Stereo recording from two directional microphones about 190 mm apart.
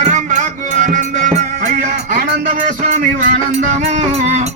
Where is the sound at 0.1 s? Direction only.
40° right (ahead or behind).